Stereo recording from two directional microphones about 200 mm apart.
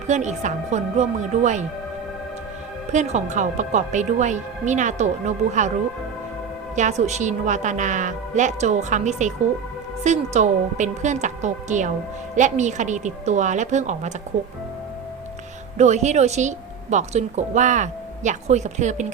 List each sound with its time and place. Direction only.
0.1 s speech: 35° right (ahead or behind)
2.9 s speech: 35° right (ahead or behind)
6.7 s speech: 35° right (ahead or behind)
15.8 s speech: 35° right (ahead or behind)